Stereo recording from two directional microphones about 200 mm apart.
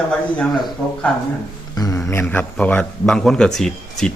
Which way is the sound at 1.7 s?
15° left (ahead or behind).